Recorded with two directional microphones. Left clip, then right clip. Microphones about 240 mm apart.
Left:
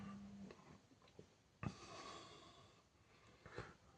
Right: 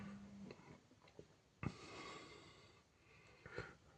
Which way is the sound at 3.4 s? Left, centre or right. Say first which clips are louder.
Right 3 dB; centre.